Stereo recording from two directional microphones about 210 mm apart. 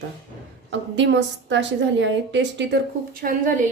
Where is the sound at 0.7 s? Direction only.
60° right (ahead or behind).